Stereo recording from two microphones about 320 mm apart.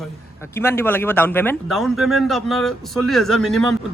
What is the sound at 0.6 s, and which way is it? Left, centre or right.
Speech, centre.